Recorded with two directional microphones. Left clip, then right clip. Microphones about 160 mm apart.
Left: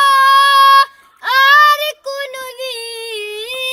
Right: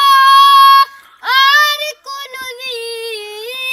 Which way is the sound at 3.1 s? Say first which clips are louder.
Left 1 dB; 35° left (ahead or behind).